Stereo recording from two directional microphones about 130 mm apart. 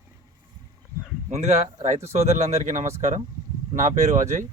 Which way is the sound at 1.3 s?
60° right (ahead or behind).